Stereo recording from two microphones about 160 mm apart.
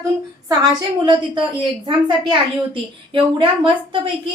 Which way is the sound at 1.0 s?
30° right (ahead or behind).